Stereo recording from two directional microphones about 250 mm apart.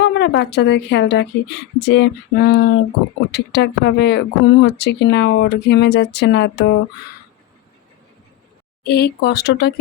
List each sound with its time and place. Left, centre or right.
0.0 s speech: left
8.8 s speech: left